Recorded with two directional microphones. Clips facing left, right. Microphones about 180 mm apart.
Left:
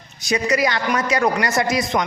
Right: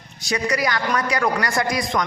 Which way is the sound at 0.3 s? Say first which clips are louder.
Left 3 dB; 20° left (ahead or behind).